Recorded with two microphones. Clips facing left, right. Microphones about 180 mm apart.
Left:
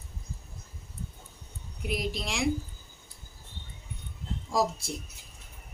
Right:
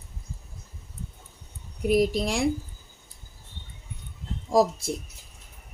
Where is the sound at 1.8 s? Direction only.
45° right (ahead or behind).